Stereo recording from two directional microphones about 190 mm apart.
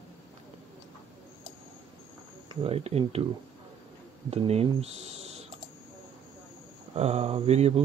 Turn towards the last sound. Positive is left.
turn(degrees=-35)  # may be behind; listen again after turning